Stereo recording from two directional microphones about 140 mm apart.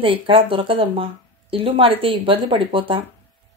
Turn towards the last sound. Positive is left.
turn(degrees=-40)  # may be behind; listen again after turning